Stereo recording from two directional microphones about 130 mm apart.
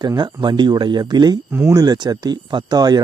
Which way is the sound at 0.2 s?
35° right (ahead or behind).